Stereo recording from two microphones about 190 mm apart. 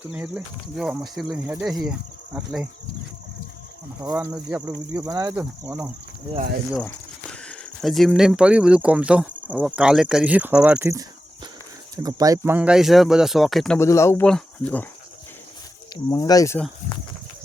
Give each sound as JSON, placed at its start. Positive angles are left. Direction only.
{"t": 0.1, "sound": "speech", "side_deg": -10}
{"t": 4.1, "sound": "speech", "side_deg": -10}
{"t": 5.0, "sound": "speech", "side_deg": -20}
{"t": 5.3, "sound": "speech", "side_deg": -10}
{"t": 6.7, "sound": "speech", "side_deg": 5}
{"t": 12.0, "sound": "speech", "side_deg": -20}
{"t": 12.5, "sound": "speech", "side_deg": -5}
{"t": 13.7, "sound": "speech", "side_deg": 15}
{"t": 16.0, "sound": "speech", "side_deg": 20}